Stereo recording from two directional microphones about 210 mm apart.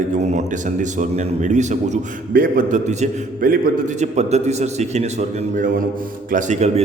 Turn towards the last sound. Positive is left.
turn(degrees=-30)  # may be behind; listen again after turning